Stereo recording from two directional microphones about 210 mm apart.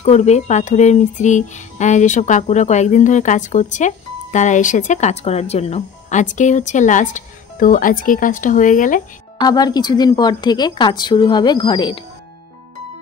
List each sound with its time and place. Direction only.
0.0 s speech: 30° left (ahead or behind)
9.4 s a woman's voice: 20° left (ahead or behind)